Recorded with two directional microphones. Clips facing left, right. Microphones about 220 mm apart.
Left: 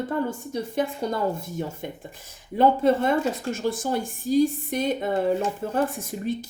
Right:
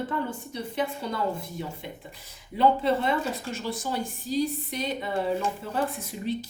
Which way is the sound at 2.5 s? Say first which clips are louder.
Left 4 dB; 45° left (ahead or behind).